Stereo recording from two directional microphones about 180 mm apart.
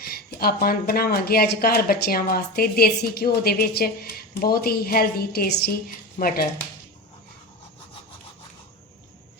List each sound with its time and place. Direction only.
0.0 s speech: 55° left (ahead or behind)
6.1 s speech: 50° left (ahead or behind)